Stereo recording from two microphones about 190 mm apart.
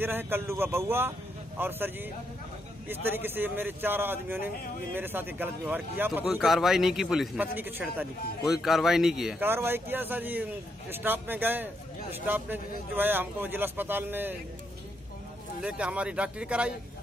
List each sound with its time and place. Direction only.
0.0 s a man's voice: 10° right (ahead or behind)
15.6 s speech: 5° right (ahead or behind)